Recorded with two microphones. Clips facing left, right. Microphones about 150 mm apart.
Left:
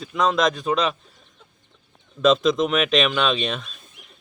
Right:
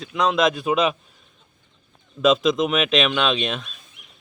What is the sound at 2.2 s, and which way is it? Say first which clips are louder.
Speech: even; centre (ahead or behind).